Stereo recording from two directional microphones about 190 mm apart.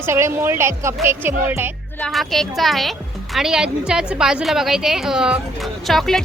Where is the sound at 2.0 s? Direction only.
Centre (ahead or behind).